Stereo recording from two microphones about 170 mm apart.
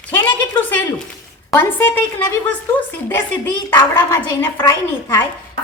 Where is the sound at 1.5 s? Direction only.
10° left (ahead or behind).